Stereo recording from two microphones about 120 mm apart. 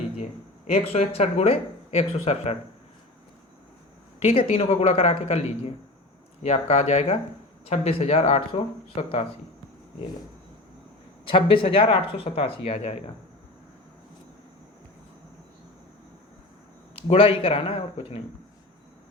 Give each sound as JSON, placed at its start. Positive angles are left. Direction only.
{"t": 0.7, "sound": "speech", "side_deg": 60}
{"t": 4.2, "sound": "speech", "side_deg": 55}
{"t": 11.3, "sound": "speech", "side_deg": 45}
{"t": 17.1, "sound": "speech", "side_deg": 50}